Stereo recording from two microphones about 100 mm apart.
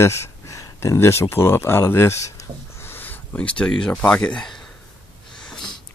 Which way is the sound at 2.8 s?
20° left (ahead or behind).